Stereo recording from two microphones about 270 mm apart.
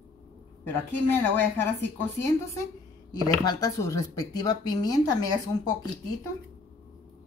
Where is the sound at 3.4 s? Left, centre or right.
Centre.